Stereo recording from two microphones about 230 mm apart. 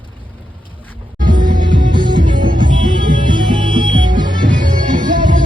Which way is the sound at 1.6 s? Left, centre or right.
Centre.